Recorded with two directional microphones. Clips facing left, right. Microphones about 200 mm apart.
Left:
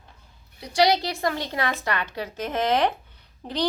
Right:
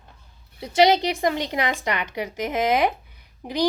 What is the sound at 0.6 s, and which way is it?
A woman's voice, 25° right (ahead or behind).